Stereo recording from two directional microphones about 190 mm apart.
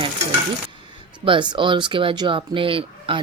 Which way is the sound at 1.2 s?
25° right (ahead or behind).